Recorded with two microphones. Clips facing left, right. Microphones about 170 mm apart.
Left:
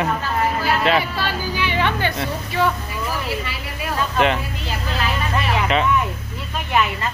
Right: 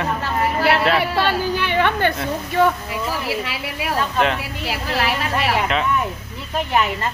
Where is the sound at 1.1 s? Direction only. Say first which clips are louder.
Right 4 dB; 65° right (ahead or behind).